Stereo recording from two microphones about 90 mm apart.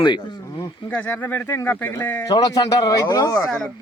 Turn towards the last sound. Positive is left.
turn(degrees=40)  # may be behind; listen again after turning